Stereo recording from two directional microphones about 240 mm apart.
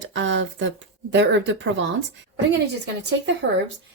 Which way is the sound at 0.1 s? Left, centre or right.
Right.